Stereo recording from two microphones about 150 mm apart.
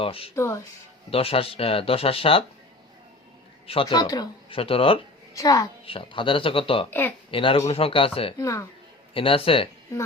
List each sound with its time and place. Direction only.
0.0 s speech: 40° left (ahead or behind)
0.3 s speech: 20° left (ahead or behind)
1.1 s speech: 40° left (ahead or behind)
3.7 s speech: 40° left (ahead or behind)
4.0 s speech: 25° left (ahead or behind)
4.5 s speech: 40° left (ahead or behind)
5.3 s a child's voice: 25° left (ahead or behind)
5.8 s speech: 35° left (ahead or behind)
8.4 s speech: 20° left (ahead or behind)
9.1 s speech: 35° left (ahead or behind)